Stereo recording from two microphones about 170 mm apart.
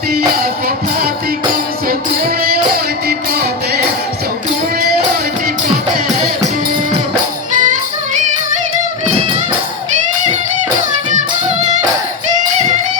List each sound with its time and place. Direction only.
0.1 s music: 60° right (ahead or behind)
1.9 s music: 60° right (ahead or behind)
7.5 s music: 45° right (ahead or behind)
11.1 s music: 45° right (ahead or behind)